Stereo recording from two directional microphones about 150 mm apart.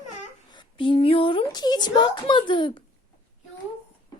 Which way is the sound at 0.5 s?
30° left (ahead or behind).